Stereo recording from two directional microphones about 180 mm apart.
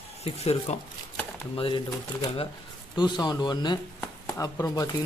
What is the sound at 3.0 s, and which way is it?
Speech, 25° left (ahead or behind).